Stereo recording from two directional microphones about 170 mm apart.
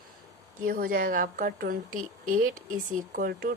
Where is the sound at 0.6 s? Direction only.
60° right (ahead or behind).